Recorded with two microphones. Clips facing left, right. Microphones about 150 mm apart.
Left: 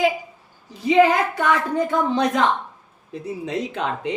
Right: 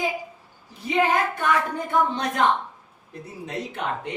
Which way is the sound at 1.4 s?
90° left.